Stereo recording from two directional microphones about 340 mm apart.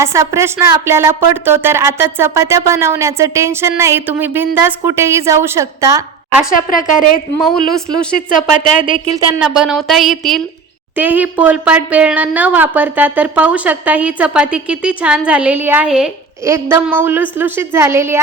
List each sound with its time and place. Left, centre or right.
0.0 s a woman's voice: centre
6.5 s speech: left
7.3 s speech: centre
8.2 s speech: left
9.1 s speech: centre